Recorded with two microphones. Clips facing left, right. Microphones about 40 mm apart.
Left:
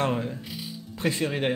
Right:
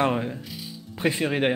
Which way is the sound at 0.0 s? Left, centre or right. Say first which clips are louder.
Right 3 dB; centre.